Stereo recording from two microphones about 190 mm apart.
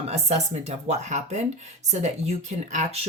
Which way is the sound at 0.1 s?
35° right (ahead or behind).